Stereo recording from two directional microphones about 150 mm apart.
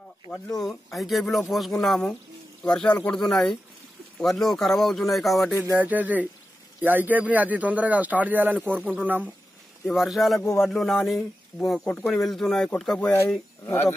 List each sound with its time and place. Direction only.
0.9 s speech: centre (ahead or behind)
5.8 s speech: 10° right (ahead or behind)
13.7 s speech: 15° left (ahead or behind)